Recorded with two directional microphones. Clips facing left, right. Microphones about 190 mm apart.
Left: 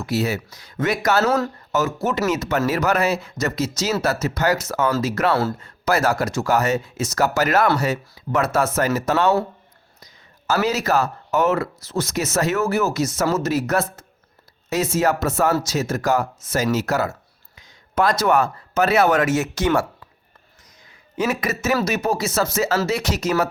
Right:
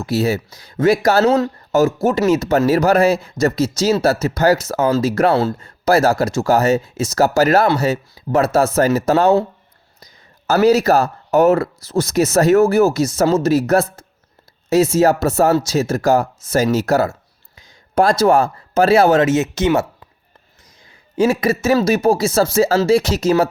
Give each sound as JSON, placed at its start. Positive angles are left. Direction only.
{"t": 0.0, "sound": "speech", "side_deg": -30}
{"t": 1.2, "sound": "speech", "side_deg": -20}
{"t": 2.0, "sound": "speech", "side_deg": -30}
{"t": 10.4, "sound": "speech", "side_deg": -35}
{"t": 21.2, "sound": "speech", "side_deg": -30}